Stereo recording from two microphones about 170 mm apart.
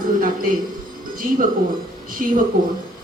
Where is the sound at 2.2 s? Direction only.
55° right (ahead or behind).